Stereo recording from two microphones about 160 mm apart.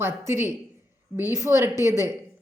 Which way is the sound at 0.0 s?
15° right (ahead or behind).